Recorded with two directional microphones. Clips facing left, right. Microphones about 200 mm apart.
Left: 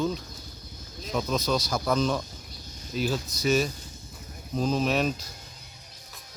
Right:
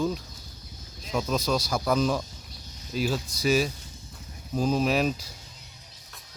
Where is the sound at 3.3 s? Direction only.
30° right (ahead or behind).